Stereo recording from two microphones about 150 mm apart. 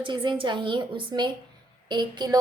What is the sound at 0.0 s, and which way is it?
A woman's voice, 35° right (ahead or behind).